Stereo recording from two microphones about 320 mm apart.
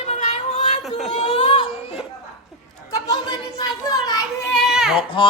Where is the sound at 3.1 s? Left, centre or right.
Centre.